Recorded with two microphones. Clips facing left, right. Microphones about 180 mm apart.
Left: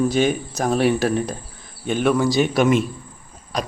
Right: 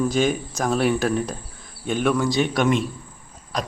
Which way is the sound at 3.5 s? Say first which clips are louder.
Left 2 dB; centre (ahead or behind).